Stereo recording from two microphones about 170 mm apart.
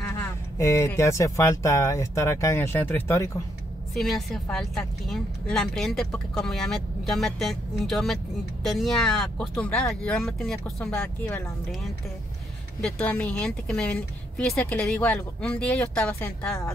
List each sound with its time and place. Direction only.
0.1 s speech: 15° left (ahead or behind)
3.9 s speech: centre (ahead or behind)
12.8 s speech: 5° left (ahead or behind)